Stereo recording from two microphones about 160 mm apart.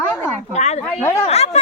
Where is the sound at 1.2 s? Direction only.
40° left (ahead or behind).